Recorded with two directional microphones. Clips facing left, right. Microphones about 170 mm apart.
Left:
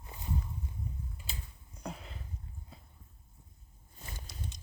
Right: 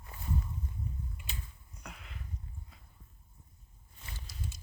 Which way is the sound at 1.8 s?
30° left (ahead or behind).